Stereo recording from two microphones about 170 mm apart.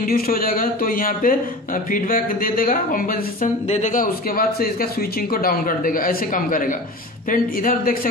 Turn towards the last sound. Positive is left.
turn(degrees=55)  # may be behind; listen again after turning